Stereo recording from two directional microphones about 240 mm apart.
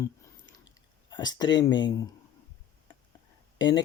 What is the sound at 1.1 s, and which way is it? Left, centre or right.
Speech, centre.